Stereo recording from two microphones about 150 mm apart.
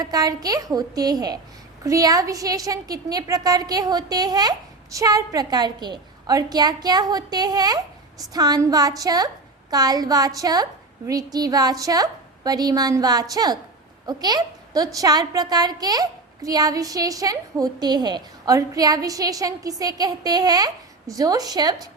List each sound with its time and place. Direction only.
0.0 s a woman's voice: 25° right (ahead or behind)